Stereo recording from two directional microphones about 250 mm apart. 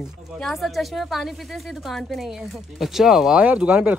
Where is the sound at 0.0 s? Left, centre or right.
Centre.